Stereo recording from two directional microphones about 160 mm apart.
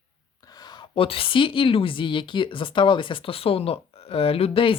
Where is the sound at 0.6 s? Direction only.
25° left (ahead or behind).